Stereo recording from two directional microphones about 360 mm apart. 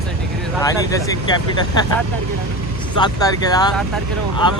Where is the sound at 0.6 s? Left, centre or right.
Centre.